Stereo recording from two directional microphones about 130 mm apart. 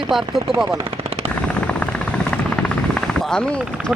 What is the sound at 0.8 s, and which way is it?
Machine gun, 45° right (ahead or behind).